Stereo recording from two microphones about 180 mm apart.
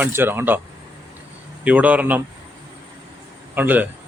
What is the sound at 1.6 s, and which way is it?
Speech, 10° right (ahead or behind).